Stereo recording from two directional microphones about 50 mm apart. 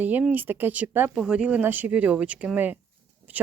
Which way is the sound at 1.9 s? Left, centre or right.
Right.